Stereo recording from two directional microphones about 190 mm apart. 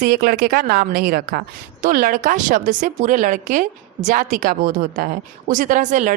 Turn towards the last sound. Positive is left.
turn(degrees=-40)  # may be behind; listen again after turning